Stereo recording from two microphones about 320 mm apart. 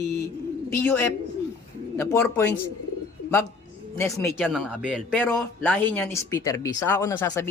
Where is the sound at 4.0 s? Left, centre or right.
Centre.